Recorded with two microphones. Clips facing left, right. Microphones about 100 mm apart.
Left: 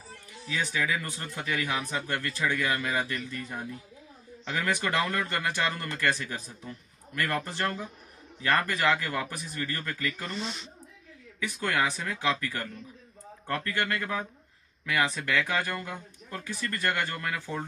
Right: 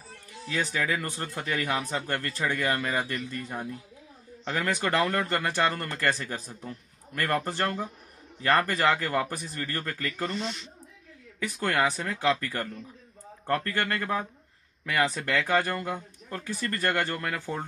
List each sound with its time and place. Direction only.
0.5 s speech: 45° right (ahead or behind)
11.4 s speech: 40° right (ahead or behind)
13.7 s speech: 45° right (ahead or behind)